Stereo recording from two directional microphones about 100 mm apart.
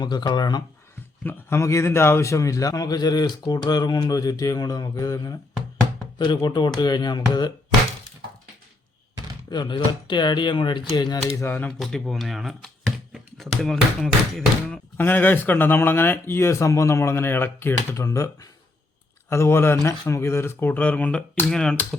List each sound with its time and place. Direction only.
0.0 s speech: 45° left (ahead or behind)
1.2 s a man's voice: 20° left (ahead or behind); by 5.4 s 40° left (ahead or behind)
6.1 s speech: 50° left (ahead or behind)
9.5 s speech: 50° left (ahead or behind)
11.8 s speech: centre (ahead or behind)
14.9 s speech: 20° left (ahead or behind)